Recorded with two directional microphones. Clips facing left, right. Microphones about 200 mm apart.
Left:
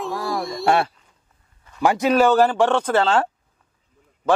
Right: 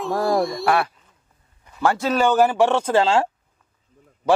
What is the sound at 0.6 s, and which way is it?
Speech, 25° left (ahead or behind).